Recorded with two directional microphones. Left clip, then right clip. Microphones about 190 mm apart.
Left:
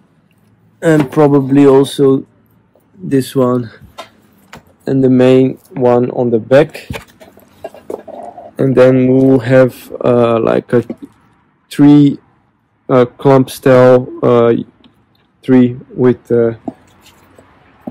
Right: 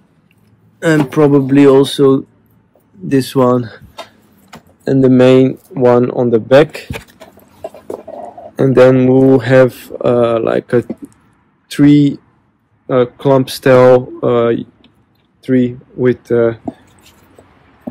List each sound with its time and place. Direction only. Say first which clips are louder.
1.1 s speech: even; 15° left (ahead or behind)
8.0 s bird: right 1 dB; 30° right (ahead or behind)
8.5 s speech: right 1 dB; 5° right (ahead or behind)
14.2 s speech: left 3 dB; 20° left (ahead or behind)
15.4 s speech: left 4 dB; 35° left (ahead or behind)
16.2 s speech: even; 5° left (ahead or behind)